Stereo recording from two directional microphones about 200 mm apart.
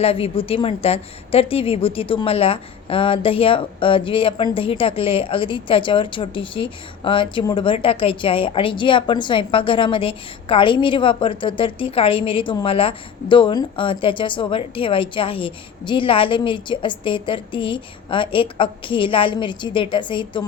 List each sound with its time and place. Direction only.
0.0 s a woman's voice: 30° left (ahead or behind)